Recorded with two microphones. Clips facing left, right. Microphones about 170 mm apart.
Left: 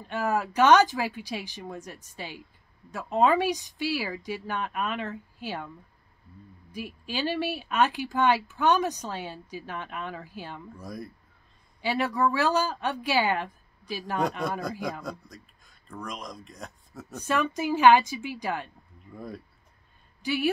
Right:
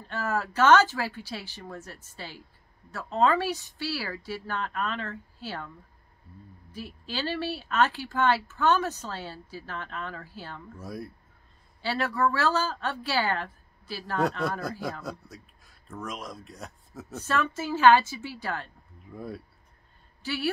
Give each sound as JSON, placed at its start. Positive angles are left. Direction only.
{"t": 0.0, "sound": "speech", "side_deg": 15}
{"t": 6.7, "sound": "speech", "side_deg": 15}
{"t": 10.8, "sound": "speech", "side_deg": 0}
{"t": 11.8, "sound": "speech", "side_deg": 15}
{"t": 14.4, "sound": "speech", "side_deg": 0}
{"t": 17.1, "sound": "speech", "side_deg": 15}
{"t": 19.0, "sound": "speech", "side_deg": 0}
{"t": 20.2, "sound": "speech", "side_deg": 15}